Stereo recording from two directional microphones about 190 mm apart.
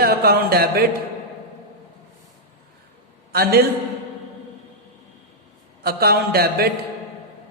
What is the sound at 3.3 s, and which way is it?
Speech, 55° right (ahead or behind).